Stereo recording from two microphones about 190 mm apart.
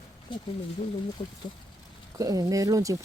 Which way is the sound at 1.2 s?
35° left (ahead or behind).